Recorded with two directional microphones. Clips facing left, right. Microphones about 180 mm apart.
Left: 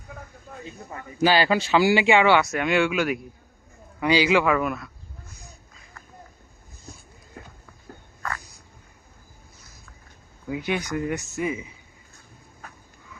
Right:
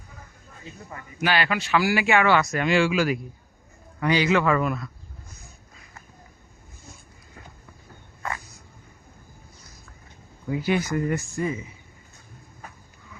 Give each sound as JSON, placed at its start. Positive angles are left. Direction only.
{"t": 1.2, "sound": "speech", "side_deg": 30}
{"t": 2.4, "sound": "speech", "side_deg": 0}
{"t": 4.0, "sound": "speech", "side_deg": 10}
{"t": 10.5, "sound": "speech", "side_deg": 0}